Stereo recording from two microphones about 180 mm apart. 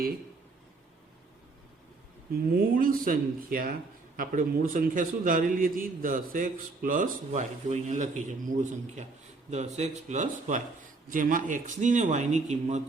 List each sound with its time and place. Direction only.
2.3 s a man's voice: 55° right (ahead or behind)